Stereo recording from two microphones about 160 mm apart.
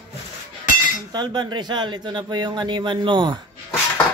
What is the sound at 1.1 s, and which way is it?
Speech, 25° right (ahead or behind).